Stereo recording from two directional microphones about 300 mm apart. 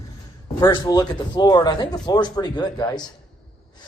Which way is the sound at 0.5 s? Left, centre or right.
Centre.